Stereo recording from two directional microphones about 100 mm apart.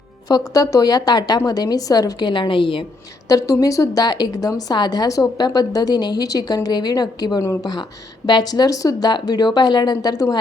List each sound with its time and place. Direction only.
0.3 s a woman's voice: 40° left (ahead or behind); by 2.8 s 60° left (ahead or behind)
3.2 s a woman's voice: 35° left (ahead or behind)